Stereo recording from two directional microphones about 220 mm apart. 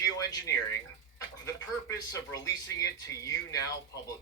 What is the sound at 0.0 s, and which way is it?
Speech, 15° left (ahead or behind).